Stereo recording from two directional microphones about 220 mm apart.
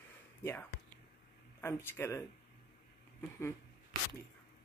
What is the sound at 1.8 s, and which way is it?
Speech, 10° left (ahead or behind).